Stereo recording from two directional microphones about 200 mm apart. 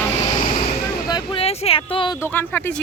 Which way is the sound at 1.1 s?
25° left (ahead or behind).